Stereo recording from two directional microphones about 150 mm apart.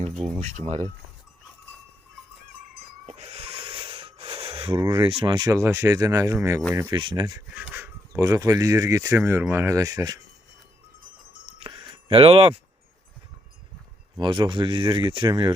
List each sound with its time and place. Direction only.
0.3 s speech: 55° right (ahead or behind)
0.6 s speech: 45° right (ahead or behind)
3.1 s a sound: 45° right (ahead or behind)
4.8 s speech: 30° right (ahead or behind)
5.5 s speech: 15° right (ahead or behind)
7.5 s speech: 10° right (ahead or behind)
11.4 s a sound: 35° right (ahead or behind)
14.2 s speech: 30° right (ahead or behind)